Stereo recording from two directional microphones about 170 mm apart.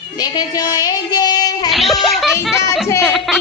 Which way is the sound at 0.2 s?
25° left (ahead or behind).